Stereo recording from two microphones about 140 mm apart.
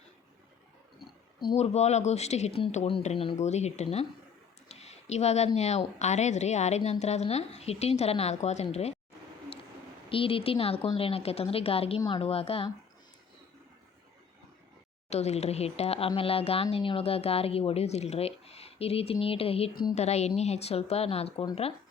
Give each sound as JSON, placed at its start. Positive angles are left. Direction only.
{"t": 1.5, "sound": "speech", "side_deg": 50}
{"t": 4.7, "sound": "a sound", "side_deg": 50}
{"t": 5.5, "sound": "speech", "side_deg": 55}
{"t": 10.1, "sound": "speech", "side_deg": 40}
{"t": 15.1, "sound": "speech", "side_deg": 50}